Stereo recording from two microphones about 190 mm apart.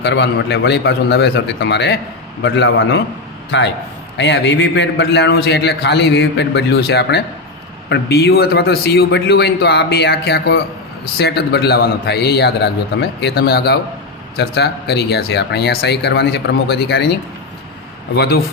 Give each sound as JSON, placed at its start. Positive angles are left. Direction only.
{"t": 0.0, "sound": "a man's voice", "side_deg": 65}